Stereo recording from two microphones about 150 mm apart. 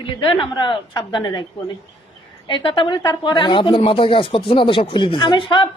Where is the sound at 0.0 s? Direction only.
35° left (ahead or behind).